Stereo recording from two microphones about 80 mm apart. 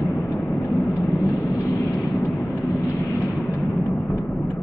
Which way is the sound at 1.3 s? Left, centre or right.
Left.